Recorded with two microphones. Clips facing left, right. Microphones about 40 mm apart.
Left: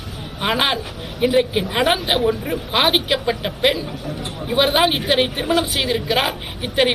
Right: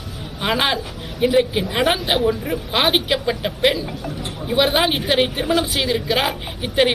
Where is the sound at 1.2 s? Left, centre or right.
Centre.